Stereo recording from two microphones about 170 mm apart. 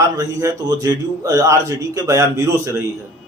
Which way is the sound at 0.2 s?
20° right (ahead or behind).